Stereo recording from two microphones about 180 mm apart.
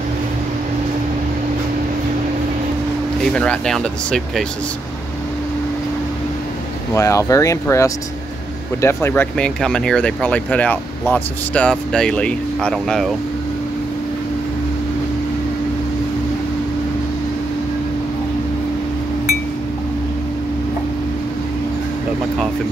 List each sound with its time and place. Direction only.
3.2 s speech: 5° left (ahead or behind)
6.9 s speech: 15° left (ahead or behind)